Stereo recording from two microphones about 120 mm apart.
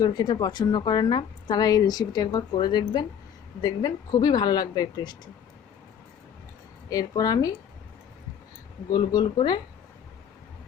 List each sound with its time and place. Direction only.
0.0 s a woman's voice: 35° left (ahead or behind)
6.9 s a woman's voice: 30° left (ahead or behind)
8.9 s a woman's voice: 35° left (ahead or behind)